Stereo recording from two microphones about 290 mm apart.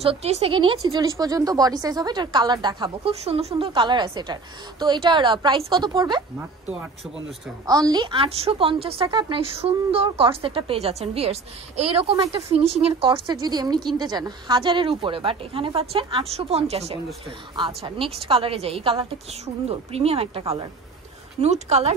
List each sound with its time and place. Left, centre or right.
0.0 s a woman's voice: right
7.6 s a woman's voice: centre